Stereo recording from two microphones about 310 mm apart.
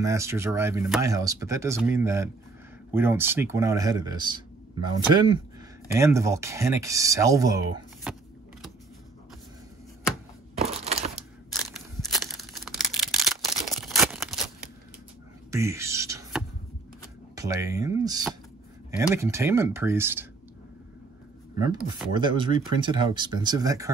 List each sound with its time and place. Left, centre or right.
0.0 s speech: centre
10.6 s a sound: centre
12.1 s a sound: centre
15.5 s beatboxing: centre
17.4 s speech: centre
21.5 s speech: centre